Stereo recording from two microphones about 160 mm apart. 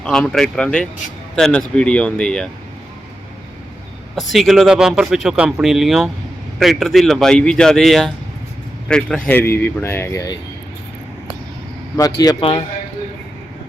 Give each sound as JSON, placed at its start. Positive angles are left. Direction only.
{"t": 0.0, "sound": "speech", "side_deg": 5}
{"t": 4.1, "sound": "a man's voice", "side_deg": 0}
{"t": 12.4, "sound": "speech", "side_deg": 35}